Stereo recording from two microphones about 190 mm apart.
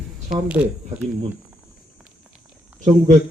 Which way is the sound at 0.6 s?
5° right (ahead or behind).